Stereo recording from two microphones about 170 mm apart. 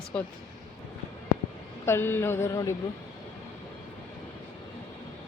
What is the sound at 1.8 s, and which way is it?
Speech, 15° left (ahead or behind).